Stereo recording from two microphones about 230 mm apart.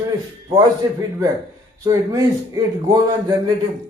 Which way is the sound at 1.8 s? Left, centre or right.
Centre.